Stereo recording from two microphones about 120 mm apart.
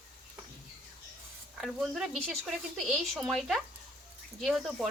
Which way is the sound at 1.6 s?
5° right (ahead or behind).